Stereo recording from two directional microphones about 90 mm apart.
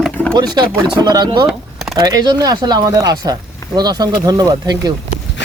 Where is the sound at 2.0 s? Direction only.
50° right (ahead or behind).